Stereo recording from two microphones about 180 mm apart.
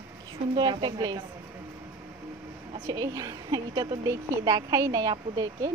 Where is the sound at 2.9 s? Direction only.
20° right (ahead or behind).